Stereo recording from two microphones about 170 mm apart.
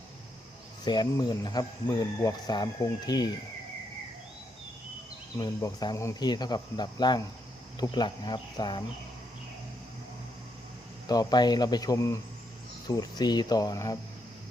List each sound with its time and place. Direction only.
0.9 s speech: 25° left (ahead or behind)
5.4 s speech: 20° left (ahead or behind)
11.0 s speech: 25° left (ahead or behind)